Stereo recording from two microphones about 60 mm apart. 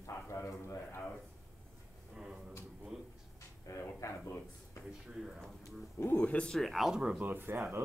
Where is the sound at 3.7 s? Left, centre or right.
Left.